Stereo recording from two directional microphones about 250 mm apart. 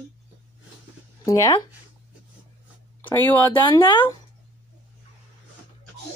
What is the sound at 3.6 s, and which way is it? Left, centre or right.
Speech, centre.